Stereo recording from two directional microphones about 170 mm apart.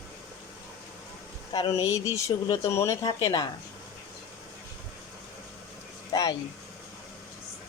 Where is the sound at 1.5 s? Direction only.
20° left (ahead or behind).